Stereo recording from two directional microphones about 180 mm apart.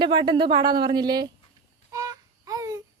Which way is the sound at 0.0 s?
25° right (ahead or behind).